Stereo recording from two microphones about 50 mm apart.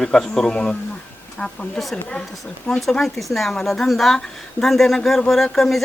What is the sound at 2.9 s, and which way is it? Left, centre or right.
A woman's voice, centre.